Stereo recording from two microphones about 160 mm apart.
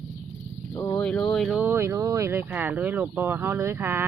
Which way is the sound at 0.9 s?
5° left (ahead or behind).